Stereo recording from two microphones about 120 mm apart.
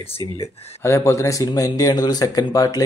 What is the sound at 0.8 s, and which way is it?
Speech, 20° left (ahead or behind).